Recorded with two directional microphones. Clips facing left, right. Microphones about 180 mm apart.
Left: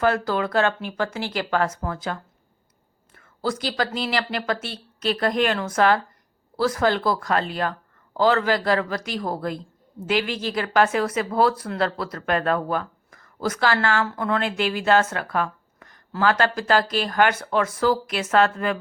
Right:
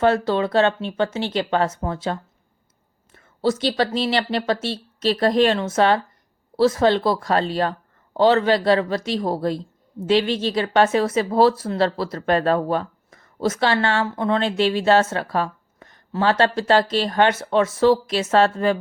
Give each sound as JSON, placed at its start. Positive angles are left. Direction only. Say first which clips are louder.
{"t": 0.0, "sound": "speech", "louder": "right 3 dB", "side_deg": -25}